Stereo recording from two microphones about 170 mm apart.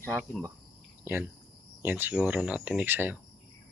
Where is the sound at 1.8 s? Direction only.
10° right (ahead or behind).